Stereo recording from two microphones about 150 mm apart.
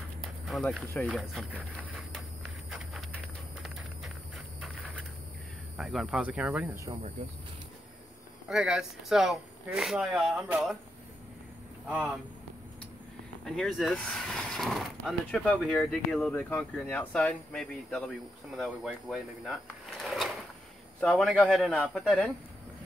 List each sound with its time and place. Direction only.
0.5 s speech: centre (ahead or behind)
2.7 s a sound: centre (ahead or behind)
4.6 s a sound: centre (ahead or behind)
5.8 s speech: centre (ahead or behind); by 7.0 s 20° right (ahead or behind)
8.5 s speech: 5° right (ahead or behind)
11.9 s speech: 5° right (ahead or behind)
13.5 s speech: centre (ahead or behind)